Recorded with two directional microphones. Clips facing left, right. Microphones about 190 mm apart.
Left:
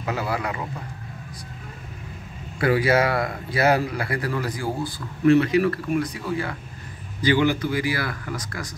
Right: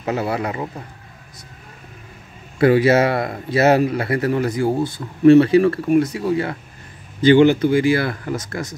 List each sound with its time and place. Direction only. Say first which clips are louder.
0.0 s speech: right 5 dB; 25° right (ahead or behind)
2.6 s speech: right 6 dB; 25° right (ahead or behind)